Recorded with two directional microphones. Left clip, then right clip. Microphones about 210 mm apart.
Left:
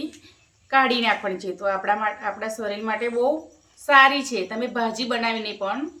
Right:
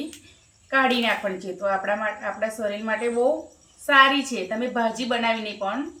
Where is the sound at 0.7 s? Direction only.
35° left (ahead or behind).